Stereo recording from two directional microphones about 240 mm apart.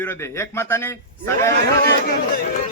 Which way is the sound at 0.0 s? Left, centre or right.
Centre.